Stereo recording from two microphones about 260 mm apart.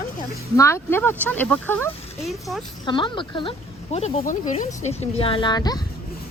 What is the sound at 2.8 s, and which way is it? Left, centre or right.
Speech, centre.